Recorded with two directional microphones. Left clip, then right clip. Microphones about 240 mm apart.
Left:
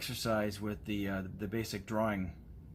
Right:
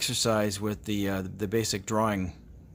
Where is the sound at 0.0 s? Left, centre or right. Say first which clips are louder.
Right 8 dB; right.